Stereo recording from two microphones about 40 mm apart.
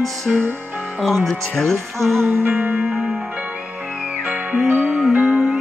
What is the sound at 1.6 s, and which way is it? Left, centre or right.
Music, centre.